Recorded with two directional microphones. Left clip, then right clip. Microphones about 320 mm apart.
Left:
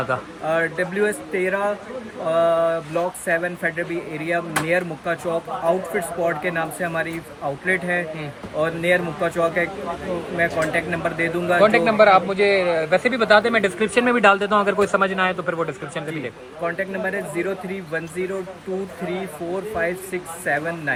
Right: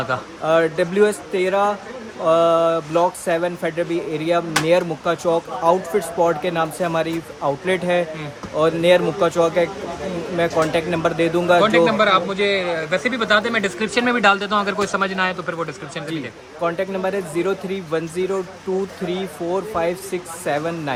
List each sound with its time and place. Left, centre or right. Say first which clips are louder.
0.1 s speech: right 1 dB; centre
0.4 s speech: right 5 dB; centre
11.6 s speech: left 1 dB; centre
16.6 s speech: right 3 dB; centre
19.8 s speech: right 2 dB; centre